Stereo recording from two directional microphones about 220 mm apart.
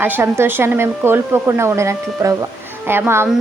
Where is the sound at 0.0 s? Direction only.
10° right (ahead or behind).